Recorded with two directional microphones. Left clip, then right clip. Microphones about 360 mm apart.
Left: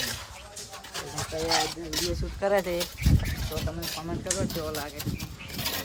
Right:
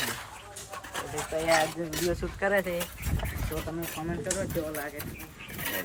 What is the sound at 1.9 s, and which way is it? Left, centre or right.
Speech, left.